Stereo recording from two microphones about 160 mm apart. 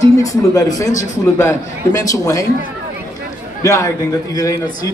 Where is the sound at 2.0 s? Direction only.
20° left (ahead or behind).